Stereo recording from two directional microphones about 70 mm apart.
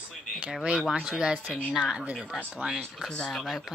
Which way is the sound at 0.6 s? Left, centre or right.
Centre.